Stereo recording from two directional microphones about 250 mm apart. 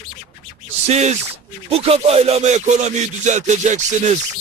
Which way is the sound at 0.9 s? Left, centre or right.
Right.